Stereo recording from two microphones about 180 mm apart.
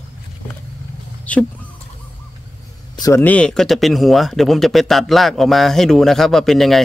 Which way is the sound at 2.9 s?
20° left (ahead or behind).